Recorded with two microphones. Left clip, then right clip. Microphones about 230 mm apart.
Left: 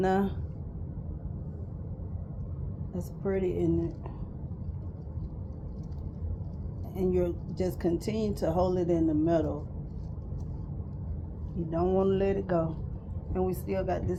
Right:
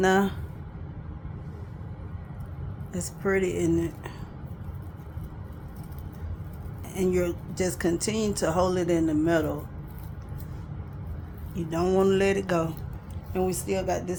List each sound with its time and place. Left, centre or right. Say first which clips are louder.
0.0 s speech: right 5 dB; right
3.2 s speech: right 4 dB; right
6.9 s speech: right 3 dB; right
11.7 s music: right 4 dB; right
13.3 s speech: right 3 dB; right